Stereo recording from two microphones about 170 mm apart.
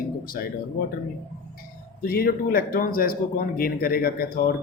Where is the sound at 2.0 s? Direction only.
60° left (ahead or behind).